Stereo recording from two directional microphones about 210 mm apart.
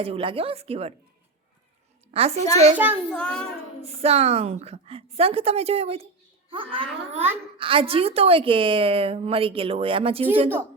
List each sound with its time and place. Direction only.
0.0 s a woman's voice: 25° right (ahead or behind)
2.1 s a woman's voice: 30° right (ahead or behind)
2.7 s a child's voice: 10° right (ahead or behind)
3.1 s child singing: 5° left (ahead or behind)
3.8 s a woman's voice: 30° right (ahead or behind)